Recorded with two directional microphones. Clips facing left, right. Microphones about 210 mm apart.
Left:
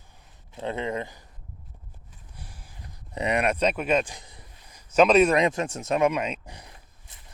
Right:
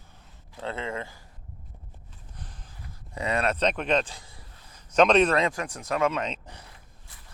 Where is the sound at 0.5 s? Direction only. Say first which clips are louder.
Left 3 dB; 20° left (ahead or behind).